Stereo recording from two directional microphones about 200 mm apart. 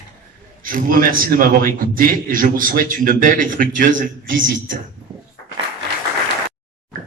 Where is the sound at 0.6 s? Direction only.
45° right (ahead or behind).